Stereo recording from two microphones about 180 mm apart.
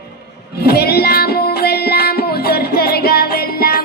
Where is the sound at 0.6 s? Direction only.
60° left (ahead or behind).